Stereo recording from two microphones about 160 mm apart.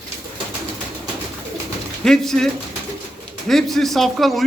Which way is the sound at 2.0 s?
5° left (ahead or behind).